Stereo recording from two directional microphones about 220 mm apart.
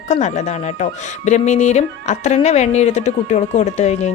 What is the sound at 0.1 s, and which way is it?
Speech, 30° left (ahead or behind).